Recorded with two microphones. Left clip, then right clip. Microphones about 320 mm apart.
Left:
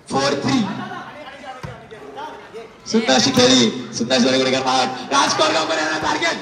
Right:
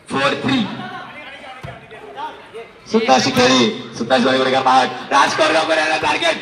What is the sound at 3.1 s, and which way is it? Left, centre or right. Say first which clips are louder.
Speech: right 1 dB; centre.